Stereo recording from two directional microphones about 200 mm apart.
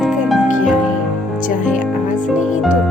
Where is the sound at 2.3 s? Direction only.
5° right (ahead or behind).